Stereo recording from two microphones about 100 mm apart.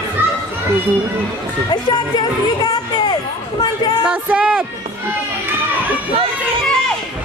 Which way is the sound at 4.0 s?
10° right (ahead or behind).